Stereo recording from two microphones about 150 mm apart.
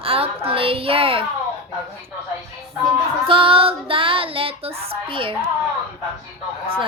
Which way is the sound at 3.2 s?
35° right (ahead or behind).